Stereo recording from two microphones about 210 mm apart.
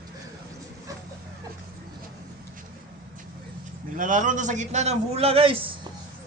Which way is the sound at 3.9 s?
40° right (ahead or behind).